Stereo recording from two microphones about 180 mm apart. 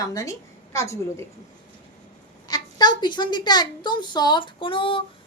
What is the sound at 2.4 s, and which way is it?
A woman's voice, 20° left (ahead or behind).